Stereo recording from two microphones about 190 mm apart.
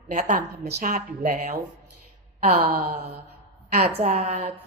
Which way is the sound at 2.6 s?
50° right (ahead or behind).